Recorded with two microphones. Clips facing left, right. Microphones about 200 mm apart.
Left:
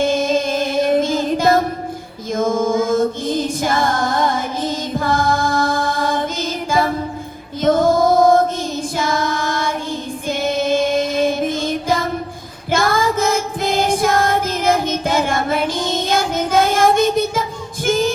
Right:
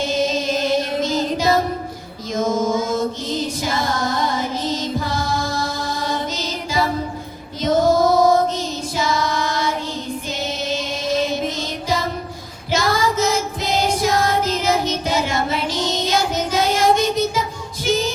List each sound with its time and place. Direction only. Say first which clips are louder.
0.0 s music: left 4 dB; 50° left (ahead or behind)
9.0 s child singing: even; 50° left (ahead or behind)
10.2 s music: left 10 dB; 55° left (ahead or behind)
12.7 s child singing: left 2 dB; 50° left (ahead or behind)
17.8 s music: left 3 dB; 50° left (ahead or behind)